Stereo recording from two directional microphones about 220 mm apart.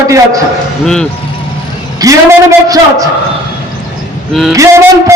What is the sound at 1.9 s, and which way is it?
A man's voice, 15° right (ahead or behind).